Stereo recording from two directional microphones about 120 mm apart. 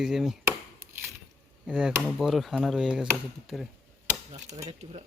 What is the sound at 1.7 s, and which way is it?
Speech, 10° right (ahead or behind).